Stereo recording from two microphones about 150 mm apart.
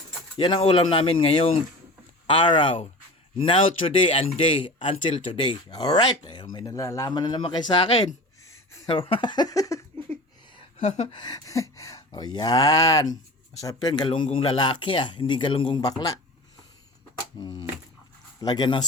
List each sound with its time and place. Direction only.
0.3 s speech: 30° left (ahead or behind)
8.4 s a sound: 20° left (ahead or behind)
8.9 s speech: 35° left (ahead or behind)
10.8 s a sound: 50° left (ahead or behind)
11.1 s speech: 30° left (ahead or behind)
17.4 s speech: 30° left (ahead or behind)